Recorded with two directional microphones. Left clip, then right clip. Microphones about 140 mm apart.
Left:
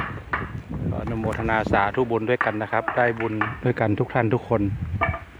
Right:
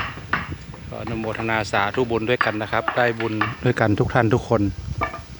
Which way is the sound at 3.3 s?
25° right (ahead or behind).